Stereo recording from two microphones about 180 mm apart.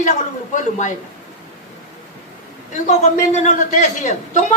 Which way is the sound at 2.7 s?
40° left (ahead or behind).